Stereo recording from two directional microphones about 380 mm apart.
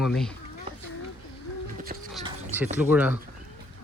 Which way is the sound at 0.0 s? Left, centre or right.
Centre.